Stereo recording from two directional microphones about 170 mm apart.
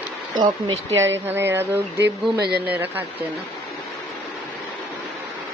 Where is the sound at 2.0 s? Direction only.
75° right (ahead or behind).